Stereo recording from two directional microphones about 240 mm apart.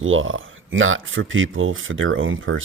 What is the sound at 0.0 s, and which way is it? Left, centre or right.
Speech, right.